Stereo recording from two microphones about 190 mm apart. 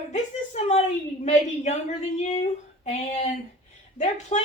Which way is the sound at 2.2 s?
40° left (ahead or behind).